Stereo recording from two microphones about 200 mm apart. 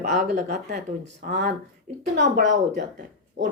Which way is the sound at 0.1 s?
35° right (ahead or behind).